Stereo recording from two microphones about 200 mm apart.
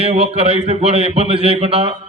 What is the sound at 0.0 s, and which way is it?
A man's voice, 30° right (ahead or behind).